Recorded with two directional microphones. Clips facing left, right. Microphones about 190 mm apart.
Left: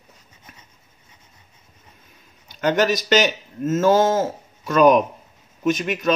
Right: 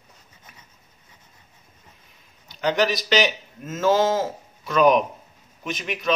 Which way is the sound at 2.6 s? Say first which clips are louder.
Left 3 dB; 50° left (ahead or behind).